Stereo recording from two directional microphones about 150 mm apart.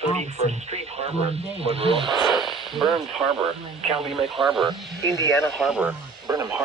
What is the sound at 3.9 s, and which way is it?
Speech, centre (ahead or behind).